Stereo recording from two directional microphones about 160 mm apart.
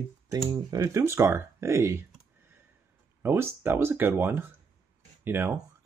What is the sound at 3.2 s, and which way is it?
Speech, 15° right (ahead or behind).